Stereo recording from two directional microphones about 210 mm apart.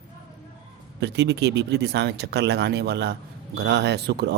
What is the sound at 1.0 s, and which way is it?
A man's voice, 55° right (ahead or behind).